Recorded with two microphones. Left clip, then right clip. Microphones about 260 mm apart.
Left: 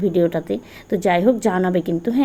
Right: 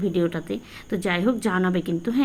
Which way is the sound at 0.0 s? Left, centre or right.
Centre.